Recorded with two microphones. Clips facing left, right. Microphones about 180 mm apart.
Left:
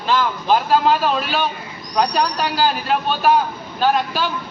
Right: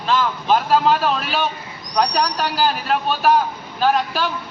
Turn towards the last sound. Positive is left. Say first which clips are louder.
# even
turn(degrees=0)  # may be behind; listen again after turning